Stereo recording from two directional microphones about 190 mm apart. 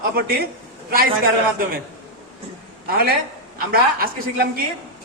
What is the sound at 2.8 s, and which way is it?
A woman's voice, 55° right (ahead or behind).